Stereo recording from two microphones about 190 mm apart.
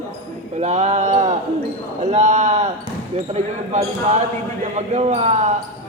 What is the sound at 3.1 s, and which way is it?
Speech, 35° right (ahead or behind).